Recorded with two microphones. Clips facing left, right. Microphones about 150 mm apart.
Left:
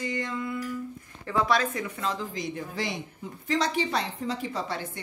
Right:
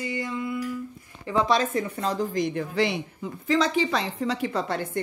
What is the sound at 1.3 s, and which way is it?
A woman's voice, 25° right (ahead or behind).